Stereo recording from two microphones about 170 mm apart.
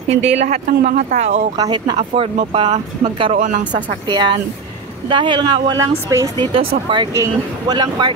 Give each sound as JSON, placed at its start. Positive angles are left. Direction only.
{"t": 0.1, "sound": "speech", "side_deg": -40}
{"t": 0.7, "sound": "speech", "side_deg": -60}
{"t": 1.1, "sound": "speech", "side_deg": -40}
{"t": 1.6, "sound": "speech", "side_deg": -25}
{"t": 3.3, "sound": "speech", "side_deg": -50}
{"t": 4.1, "sound": "speech", "side_deg": -25}